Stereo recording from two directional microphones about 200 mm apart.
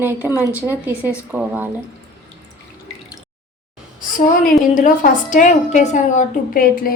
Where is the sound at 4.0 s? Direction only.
40° left (ahead or behind).